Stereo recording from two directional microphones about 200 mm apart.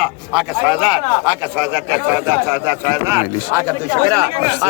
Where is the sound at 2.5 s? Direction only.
10° right (ahead or behind).